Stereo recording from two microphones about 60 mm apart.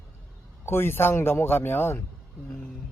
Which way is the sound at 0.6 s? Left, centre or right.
Left.